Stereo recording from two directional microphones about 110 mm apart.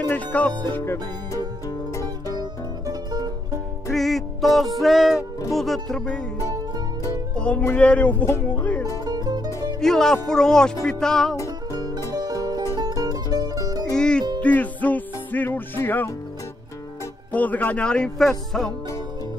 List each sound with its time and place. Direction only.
0.0 s speech: 15° left (ahead or behind)
2.9 s music: 40° right (ahead or behind)
3.9 s music: centre (ahead or behind)
5.5 s speech: centre (ahead or behind)
7.3 s music: 10° left (ahead or behind)
7.6 s speech: 10° left (ahead or behind)
8.5 s music: 15° left (ahead or behind)
9.0 s music: 35° right (ahead or behind)
9.8 s speech: 5° left (ahead or behind)
12.1 s music: 35° right (ahead or behind)
13.9 s music: 10° left (ahead or behind)
17.3 s speech: 15° left (ahead or behind)